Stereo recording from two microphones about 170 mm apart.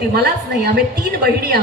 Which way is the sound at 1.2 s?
65° right (ahead or behind).